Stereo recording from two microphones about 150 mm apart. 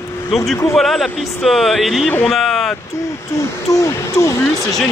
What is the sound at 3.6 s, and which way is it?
Speech, 20° left (ahead or behind).